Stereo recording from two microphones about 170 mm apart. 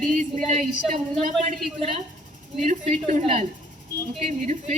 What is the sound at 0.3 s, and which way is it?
A woman's voice, 40° right (ahead or behind).